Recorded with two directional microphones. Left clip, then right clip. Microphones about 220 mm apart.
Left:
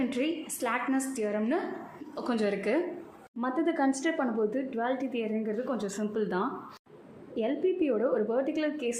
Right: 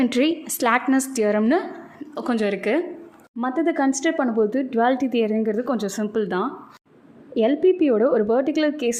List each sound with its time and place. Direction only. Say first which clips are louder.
0.0 s a woman's voice: right 10 dB; 45° right (ahead or behind)
2.1 s speech: right 7 dB; 30° right (ahead or behind)